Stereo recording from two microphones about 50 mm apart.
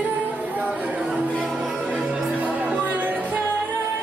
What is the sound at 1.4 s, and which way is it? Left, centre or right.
Music, centre.